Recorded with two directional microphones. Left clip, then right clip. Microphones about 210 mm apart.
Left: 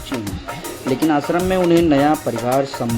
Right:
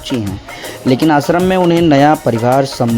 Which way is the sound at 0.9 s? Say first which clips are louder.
Right 6 dB; 45° right (ahead or behind).